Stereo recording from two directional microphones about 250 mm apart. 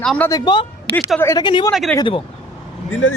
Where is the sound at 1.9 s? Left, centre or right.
Centre.